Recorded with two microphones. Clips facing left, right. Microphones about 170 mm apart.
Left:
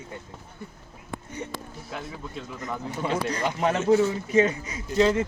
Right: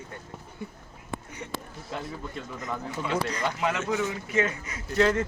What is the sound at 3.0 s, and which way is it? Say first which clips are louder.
Speech: left 2 dB; 35° left (ahead or behind).